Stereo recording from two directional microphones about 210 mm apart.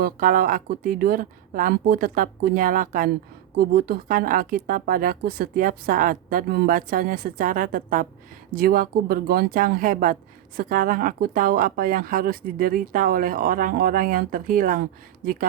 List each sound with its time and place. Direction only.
0.0 s speech: 40° right (ahead or behind)